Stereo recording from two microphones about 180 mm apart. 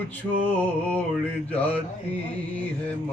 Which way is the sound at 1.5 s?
10° left (ahead or behind).